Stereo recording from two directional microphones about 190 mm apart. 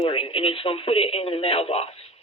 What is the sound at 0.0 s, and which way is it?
Speech, 30° left (ahead or behind).